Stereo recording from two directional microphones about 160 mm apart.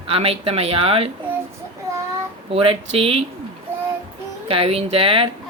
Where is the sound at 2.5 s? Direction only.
35° right (ahead or behind).